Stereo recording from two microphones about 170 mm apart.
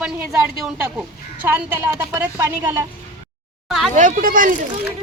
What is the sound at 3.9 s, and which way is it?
Speech, 50° right (ahead or behind).